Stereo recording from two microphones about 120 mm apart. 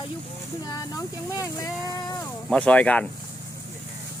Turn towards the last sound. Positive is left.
turn(degrees=10)  # may be behind; listen again after turning